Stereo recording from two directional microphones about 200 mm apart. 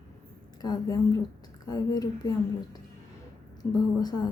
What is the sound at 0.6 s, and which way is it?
A woman's voice, 20° left (ahead or behind).